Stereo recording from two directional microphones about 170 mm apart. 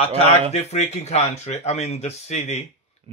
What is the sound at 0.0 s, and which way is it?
Speech, 35° left (ahead or behind).